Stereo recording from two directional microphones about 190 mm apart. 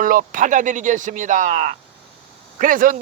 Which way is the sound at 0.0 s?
45° right (ahead or behind).